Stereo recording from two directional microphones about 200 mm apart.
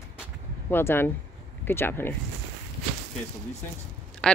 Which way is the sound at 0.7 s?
10° left (ahead or behind).